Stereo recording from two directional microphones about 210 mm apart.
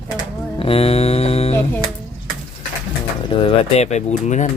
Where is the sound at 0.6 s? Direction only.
30° left (ahead or behind).